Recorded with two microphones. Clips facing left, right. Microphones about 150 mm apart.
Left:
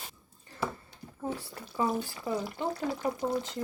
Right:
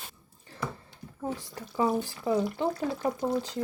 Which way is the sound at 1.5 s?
15° right (ahead or behind).